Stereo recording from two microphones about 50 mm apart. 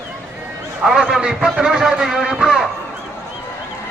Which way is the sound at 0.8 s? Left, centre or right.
Centre.